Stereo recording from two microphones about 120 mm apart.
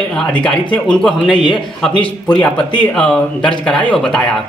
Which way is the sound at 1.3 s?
40° left (ahead or behind).